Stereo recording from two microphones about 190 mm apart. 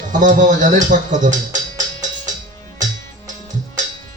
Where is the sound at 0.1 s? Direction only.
40° right (ahead or behind).